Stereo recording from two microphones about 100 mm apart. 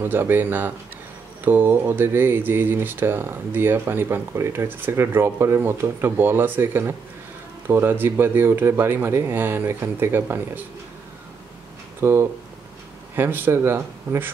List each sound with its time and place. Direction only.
0.0 s speech: 20° right (ahead or behind)
12.0 s speech: 25° right (ahead or behind)